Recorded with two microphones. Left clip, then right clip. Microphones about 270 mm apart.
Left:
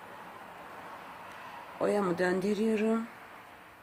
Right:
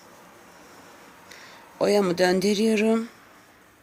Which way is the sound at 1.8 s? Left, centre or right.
Right.